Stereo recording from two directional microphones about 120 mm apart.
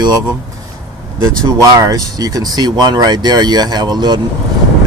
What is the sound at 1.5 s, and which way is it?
Speech, 30° right (ahead or behind).